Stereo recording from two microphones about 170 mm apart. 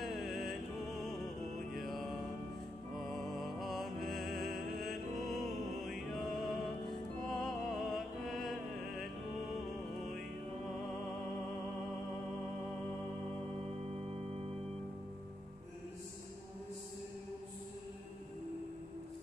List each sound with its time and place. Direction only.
0.0 s music: centre (ahead or behind)
1.7 s mantra: centre (ahead or behind)
3.0 s music: centre (ahead or behind)